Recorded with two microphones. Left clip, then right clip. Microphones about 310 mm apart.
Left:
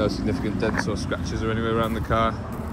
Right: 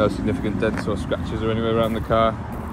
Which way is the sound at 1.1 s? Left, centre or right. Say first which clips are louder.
Right 3 dB; centre.